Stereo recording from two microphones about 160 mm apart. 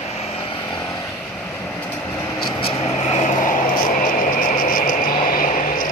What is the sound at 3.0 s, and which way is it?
Vehicle, 50° left (ahead or behind).